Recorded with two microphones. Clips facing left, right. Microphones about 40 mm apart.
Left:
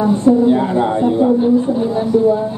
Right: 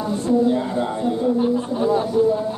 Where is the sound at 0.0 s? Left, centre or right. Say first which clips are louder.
Left 7 dB; left.